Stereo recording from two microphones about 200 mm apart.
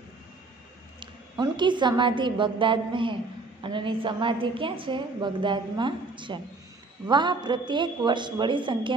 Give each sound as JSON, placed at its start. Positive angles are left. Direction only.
{"t": 0.9, "sound": "a woman's voice", "side_deg": -20}